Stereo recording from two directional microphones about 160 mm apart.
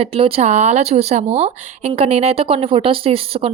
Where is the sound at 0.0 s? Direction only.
35° right (ahead or behind).